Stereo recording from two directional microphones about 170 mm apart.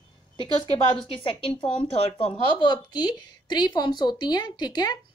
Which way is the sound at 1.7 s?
35° left (ahead or behind).